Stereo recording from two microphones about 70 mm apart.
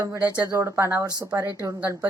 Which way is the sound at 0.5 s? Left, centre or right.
Right.